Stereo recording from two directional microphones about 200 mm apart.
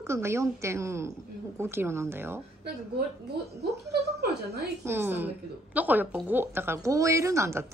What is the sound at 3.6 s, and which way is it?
Speech, 55° right (ahead or behind).